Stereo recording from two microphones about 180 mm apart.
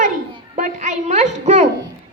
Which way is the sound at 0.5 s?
45° right (ahead or behind).